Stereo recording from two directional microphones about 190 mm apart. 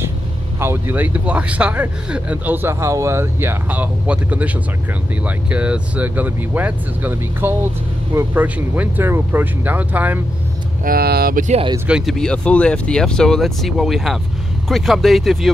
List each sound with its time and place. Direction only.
0.6 s speech: 10° right (ahead or behind)
10.8 s speech: 50° right (ahead or behind)
11.9 s speech: centre (ahead or behind)